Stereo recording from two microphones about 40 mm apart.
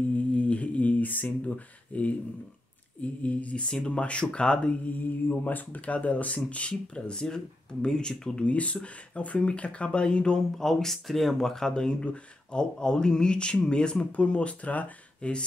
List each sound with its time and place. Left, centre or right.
0.3 s a sound: left
1.9 s speech: left
3.6 s speech: left
4.8 s mantra: left
5.8 s speech: left
6.7 s speech: left
8.4 s speech: left
10.6 s speech: centre; by 15.4 s left